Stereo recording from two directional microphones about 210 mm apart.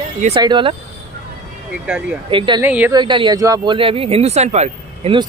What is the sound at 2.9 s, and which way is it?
Speech, 20° right (ahead or behind).